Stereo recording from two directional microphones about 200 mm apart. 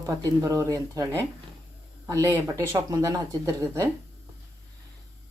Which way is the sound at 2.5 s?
15° right (ahead or behind).